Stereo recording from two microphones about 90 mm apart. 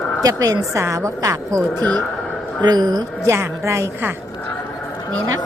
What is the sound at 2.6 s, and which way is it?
Speech, 50° right (ahead or behind).